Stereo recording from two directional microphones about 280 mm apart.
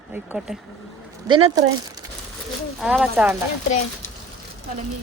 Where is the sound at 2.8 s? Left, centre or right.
Centre.